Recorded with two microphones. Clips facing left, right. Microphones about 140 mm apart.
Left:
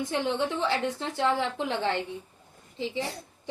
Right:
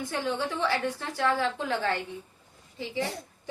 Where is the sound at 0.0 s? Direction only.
20° left (ahead or behind).